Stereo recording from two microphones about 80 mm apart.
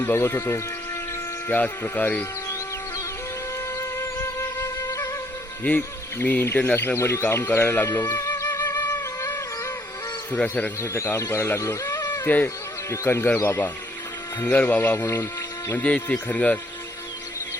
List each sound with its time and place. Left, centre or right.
0.0 s speech: left
1.5 s speech: left
3.8 s music: left
5.6 s speech: left
8.6 s music: left
8.9 s music: left
10.8 s speech: left
12.0 s a sound: left
12.9 s speech: left
14.5 s speech: left
15.8 s speech: left